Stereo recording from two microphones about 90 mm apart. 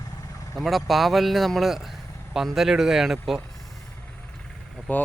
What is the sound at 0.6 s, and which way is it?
Speech, centre (ahead or behind).